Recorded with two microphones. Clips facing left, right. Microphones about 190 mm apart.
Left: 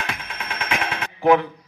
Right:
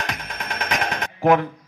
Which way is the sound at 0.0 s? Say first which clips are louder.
Right 1 dB; 40° right (ahead or behind).